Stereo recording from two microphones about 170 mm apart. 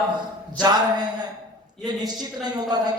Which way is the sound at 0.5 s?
25° right (ahead or behind).